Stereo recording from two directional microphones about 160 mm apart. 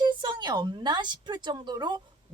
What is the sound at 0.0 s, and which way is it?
A woman's voice, 30° right (ahead or behind).